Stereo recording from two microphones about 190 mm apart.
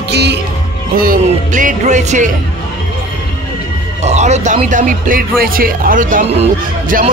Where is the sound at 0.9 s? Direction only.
45° right (ahead or behind).